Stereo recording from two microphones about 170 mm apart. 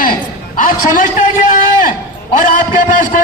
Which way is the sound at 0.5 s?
55° left (ahead or behind).